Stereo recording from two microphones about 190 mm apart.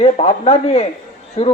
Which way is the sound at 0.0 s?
35° left (ahead or behind).